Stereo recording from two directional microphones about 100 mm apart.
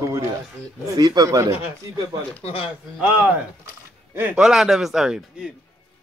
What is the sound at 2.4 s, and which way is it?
Speech, 70° left (ahead or behind).